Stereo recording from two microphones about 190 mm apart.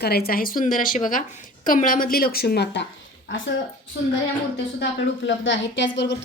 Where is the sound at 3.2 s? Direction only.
75° left (ahead or behind).